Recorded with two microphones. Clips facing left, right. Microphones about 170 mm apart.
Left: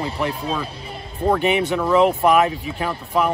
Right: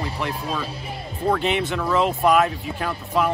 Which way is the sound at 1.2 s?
15° left (ahead or behind).